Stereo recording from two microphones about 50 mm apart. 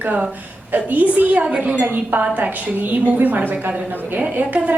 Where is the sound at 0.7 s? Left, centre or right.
Right.